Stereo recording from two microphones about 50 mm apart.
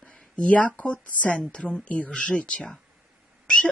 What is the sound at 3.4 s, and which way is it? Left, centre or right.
Cat, centre.